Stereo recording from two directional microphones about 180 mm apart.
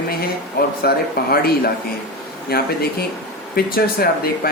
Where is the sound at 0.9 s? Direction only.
60° left (ahead or behind).